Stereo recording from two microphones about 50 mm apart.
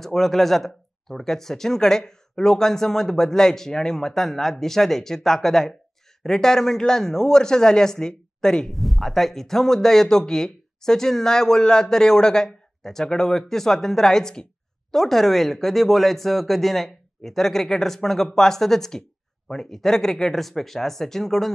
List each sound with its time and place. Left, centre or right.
0.0 s speech: centre
8.7 s speech: centre